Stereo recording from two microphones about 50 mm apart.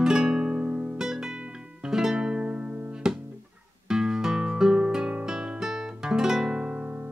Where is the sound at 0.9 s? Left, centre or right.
Centre.